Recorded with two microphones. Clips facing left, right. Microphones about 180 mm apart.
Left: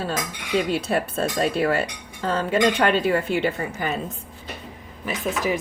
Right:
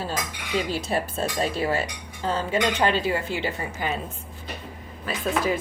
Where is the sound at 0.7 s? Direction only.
60° left (ahead or behind).